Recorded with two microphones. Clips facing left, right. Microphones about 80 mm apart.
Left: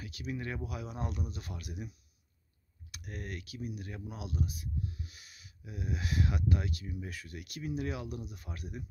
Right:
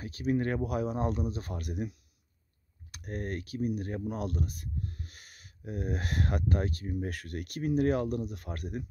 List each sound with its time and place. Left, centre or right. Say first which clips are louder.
0.0 s speech: right 10 dB; right
0.8 s speech: right 9 dB; right
2.9 s speech: right 7 dB; right
8.2 s speech: right 8 dB; right